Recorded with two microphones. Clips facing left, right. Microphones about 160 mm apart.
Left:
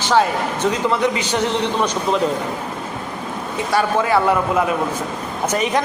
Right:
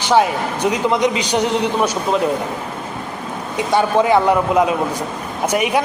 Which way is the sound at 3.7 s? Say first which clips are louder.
Right 3 dB; 20° right (ahead or behind).